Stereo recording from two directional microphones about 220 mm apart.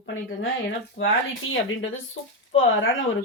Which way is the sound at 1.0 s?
60° left (ahead or behind).